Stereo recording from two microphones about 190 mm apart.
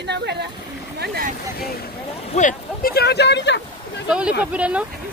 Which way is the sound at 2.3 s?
40° left (ahead or behind).